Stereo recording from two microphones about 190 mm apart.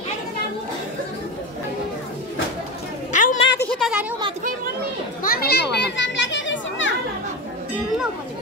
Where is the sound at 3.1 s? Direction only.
40° left (ahead or behind).